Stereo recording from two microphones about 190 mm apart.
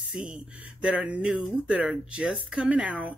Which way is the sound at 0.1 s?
5° right (ahead or behind).